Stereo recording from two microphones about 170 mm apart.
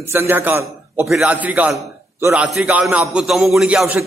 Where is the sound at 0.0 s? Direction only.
15° right (ahead or behind).